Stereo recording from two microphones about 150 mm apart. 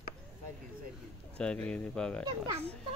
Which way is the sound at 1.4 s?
5° left (ahead or behind).